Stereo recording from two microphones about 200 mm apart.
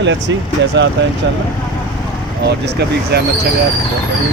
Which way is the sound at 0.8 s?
65° right (ahead or behind).